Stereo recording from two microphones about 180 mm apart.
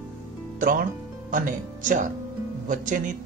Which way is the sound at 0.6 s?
50° right (ahead or behind).